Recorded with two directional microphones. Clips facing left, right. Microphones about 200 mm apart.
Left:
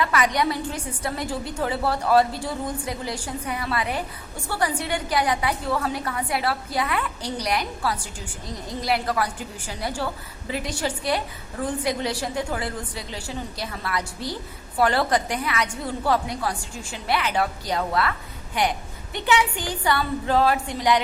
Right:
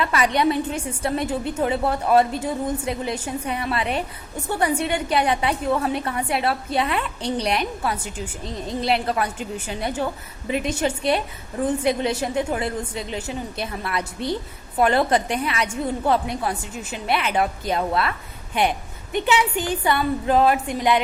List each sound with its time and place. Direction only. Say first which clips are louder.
0.0 s a sound: right 1 dB; 25° right (ahead or behind)
0.3 s a woman's voice: right 4 dB; 25° right (ahead or behind)
19.2 s a woman's voice: right 1 dB; 20° right (ahead or behind)